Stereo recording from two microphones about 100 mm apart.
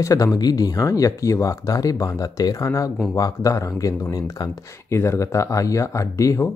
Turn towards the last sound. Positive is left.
turn(degrees=35)  # may be behind; listen again after turning